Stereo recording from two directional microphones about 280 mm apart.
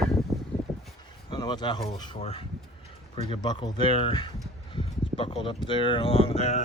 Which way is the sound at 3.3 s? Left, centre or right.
Centre.